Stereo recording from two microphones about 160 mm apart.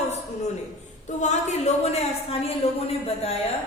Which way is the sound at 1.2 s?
45° left (ahead or behind).